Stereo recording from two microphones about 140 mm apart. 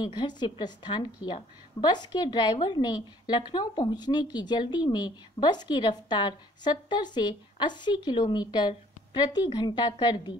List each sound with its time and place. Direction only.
0.0 s a woman's voice: 30° left (ahead or behind)